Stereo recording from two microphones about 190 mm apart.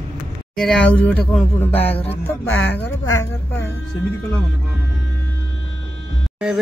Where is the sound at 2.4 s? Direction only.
90° left.